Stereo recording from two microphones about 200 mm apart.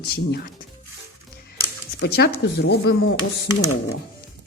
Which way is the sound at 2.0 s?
50° left (ahead or behind).